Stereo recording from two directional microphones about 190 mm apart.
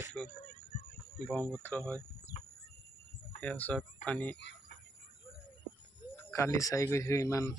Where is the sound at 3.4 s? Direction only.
10° left (ahead or behind).